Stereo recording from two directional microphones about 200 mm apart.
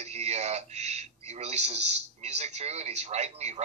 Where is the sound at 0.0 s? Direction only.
35° right (ahead or behind).